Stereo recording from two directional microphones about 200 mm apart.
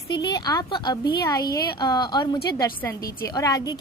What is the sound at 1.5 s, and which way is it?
Speech, 50° left (ahead or behind).